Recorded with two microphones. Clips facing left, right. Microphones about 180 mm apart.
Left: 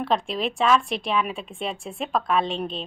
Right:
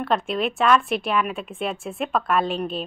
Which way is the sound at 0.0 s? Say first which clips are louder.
Right 1 dB; centre (ahead or behind).